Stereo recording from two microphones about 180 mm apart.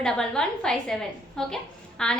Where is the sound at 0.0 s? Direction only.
5° left (ahead or behind).